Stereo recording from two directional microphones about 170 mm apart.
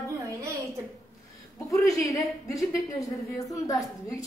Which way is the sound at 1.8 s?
20° left (ahead or behind).